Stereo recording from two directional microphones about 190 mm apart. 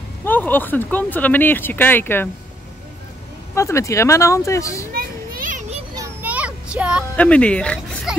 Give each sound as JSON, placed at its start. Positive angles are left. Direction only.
{"t": 0.2, "sound": "speech", "side_deg": 10}
{"t": 3.5, "sound": "speech", "side_deg": 15}
{"t": 4.9, "sound": "children playing", "side_deg": -45}
{"t": 5.9, "sound": "a sound", "side_deg": -10}
{"t": 7.2, "sound": "speech", "side_deg": 5}